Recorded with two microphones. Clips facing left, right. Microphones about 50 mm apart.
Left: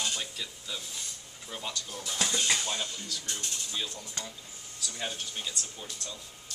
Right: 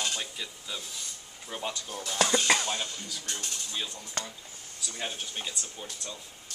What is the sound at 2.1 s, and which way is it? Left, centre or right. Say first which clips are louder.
Speech: right 6 dB; right.